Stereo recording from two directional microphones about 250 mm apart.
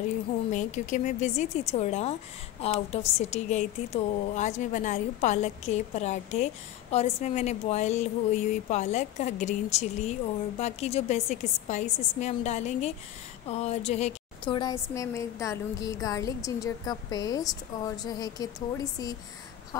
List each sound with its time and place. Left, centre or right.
0.5 s a woman's voice: left; by 19.9 s centre